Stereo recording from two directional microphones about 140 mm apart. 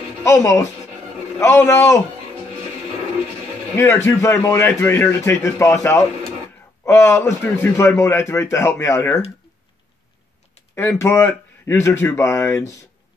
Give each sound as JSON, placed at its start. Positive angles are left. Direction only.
{"t": 0.2, "sound": "a man's voice", "side_deg": 20}
{"t": 3.7, "sound": "a man's voice", "side_deg": 15}
{"t": 10.7, "sound": "speech", "side_deg": 15}